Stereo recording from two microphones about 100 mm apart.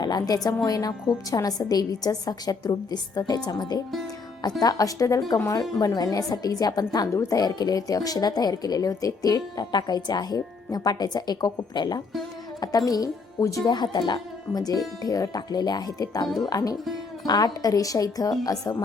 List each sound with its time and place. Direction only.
0.0 s a woman's voice: 45° left (ahead or behind)
13.7 s a woman's voice: 45° left (ahead or behind)